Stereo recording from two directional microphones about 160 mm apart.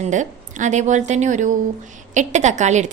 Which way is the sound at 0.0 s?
50° right (ahead or behind).